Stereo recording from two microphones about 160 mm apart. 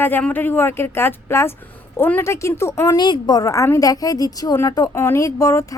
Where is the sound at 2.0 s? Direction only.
15° left (ahead or behind).